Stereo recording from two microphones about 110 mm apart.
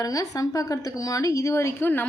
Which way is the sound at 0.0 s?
30° left (ahead or behind).